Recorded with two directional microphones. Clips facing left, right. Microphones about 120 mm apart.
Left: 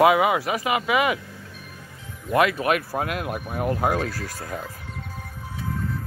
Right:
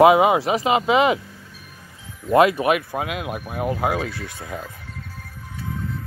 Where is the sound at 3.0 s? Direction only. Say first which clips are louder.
Even; 10° right (ahead or behind).